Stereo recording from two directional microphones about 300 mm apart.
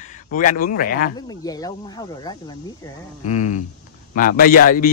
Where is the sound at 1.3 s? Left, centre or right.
Centre.